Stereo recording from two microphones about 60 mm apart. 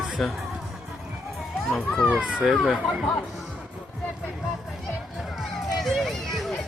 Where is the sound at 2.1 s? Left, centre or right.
Right.